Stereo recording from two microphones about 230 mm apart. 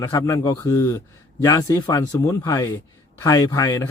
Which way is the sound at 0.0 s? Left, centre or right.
Centre.